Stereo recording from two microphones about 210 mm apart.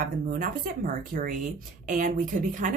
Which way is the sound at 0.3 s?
40° right (ahead or behind).